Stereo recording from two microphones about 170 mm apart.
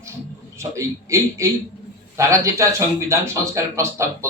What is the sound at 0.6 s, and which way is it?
Speech, 15° right (ahead or behind).